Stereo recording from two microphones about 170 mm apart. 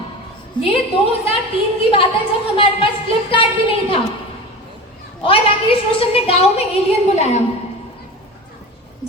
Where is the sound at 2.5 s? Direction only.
30° left (ahead or behind).